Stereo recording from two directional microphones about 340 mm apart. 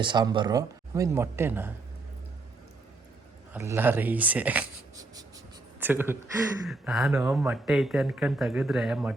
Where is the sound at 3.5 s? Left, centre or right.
Centre.